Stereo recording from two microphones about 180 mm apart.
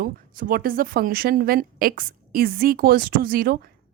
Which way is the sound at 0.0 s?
50° right (ahead or behind).